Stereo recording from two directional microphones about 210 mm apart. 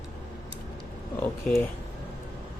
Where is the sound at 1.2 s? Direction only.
10° left (ahead or behind).